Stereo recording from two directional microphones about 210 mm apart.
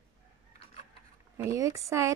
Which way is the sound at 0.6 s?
30° left (ahead or behind).